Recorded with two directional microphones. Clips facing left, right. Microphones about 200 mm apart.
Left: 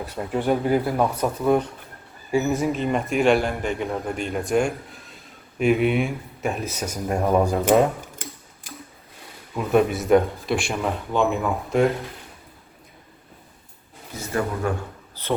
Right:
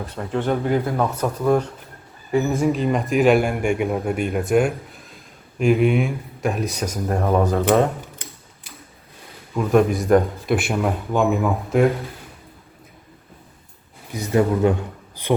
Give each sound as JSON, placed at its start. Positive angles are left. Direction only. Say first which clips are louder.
{"t": 0.2, "sound": "a man's voice", "louder": "even", "side_deg": 10}
{"t": 9.6, "sound": "a man's voice", "louder": "right 2 dB", "side_deg": 5}
{"t": 14.1, "sound": "a man's voice", "louder": "right 7 dB", "side_deg": -20}